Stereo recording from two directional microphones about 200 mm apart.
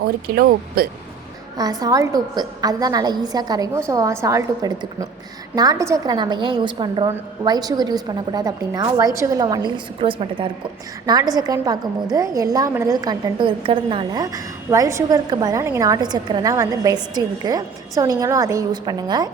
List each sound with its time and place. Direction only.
0.0 s speech: 50° right (ahead or behind)
1.5 s a woman's voice: 20° right (ahead or behind)